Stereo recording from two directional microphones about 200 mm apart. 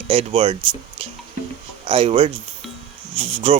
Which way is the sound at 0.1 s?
25° right (ahead or behind).